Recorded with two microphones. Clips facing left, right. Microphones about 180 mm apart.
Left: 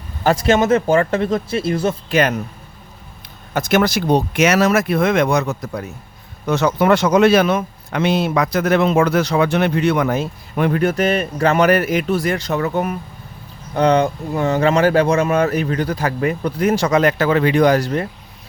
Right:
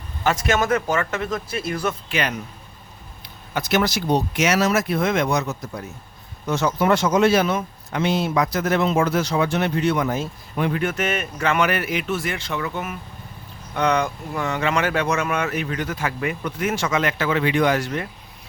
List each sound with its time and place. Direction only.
0.3 s speech: 30° left (ahead or behind)
3.5 s speech: 50° left (ahead or behind)